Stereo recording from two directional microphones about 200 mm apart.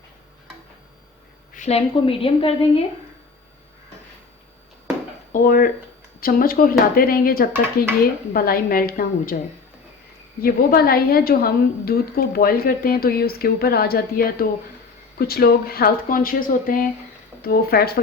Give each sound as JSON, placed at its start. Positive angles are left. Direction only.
{"t": 1.5, "sound": "a woman's voice", "side_deg": 35}
{"t": 5.3, "sound": "a woman's voice", "side_deg": 45}
{"t": 10.4, "sound": "a woman's voice", "side_deg": 50}